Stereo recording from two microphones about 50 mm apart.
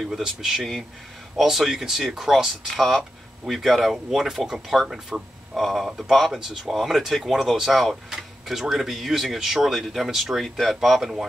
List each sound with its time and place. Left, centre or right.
0.0 s speech: centre
0.6 s speech: centre
2.7 s speech: centre
5.6 s speech: centre